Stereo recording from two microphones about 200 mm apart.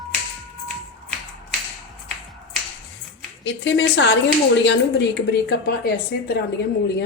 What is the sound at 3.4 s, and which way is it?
Speech, 65° left (ahead or behind).